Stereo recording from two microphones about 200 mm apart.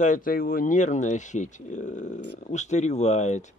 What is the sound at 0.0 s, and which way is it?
Speech, 40° left (ahead or behind).